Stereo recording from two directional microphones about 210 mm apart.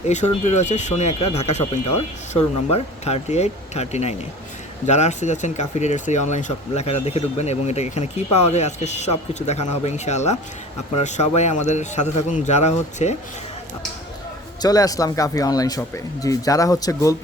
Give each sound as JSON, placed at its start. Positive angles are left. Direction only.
{"t": 0.1, "sound": "speech", "side_deg": 35}
{"t": 14.6, "sound": "speech", "side_deg": 15}